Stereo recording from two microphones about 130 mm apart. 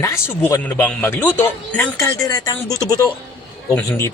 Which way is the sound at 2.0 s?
25° left (ahead or behind).